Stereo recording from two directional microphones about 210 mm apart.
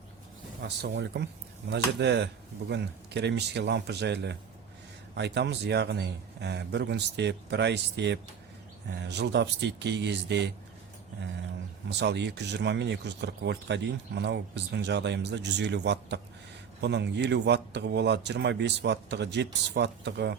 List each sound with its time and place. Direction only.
0.6 s speech: 55° right (ahead or behind)
11.9 s speech: 55° right (ahead or behind)